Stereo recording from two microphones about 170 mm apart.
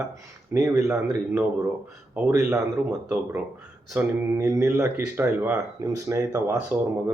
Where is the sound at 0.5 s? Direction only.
15° right (ahead or behind).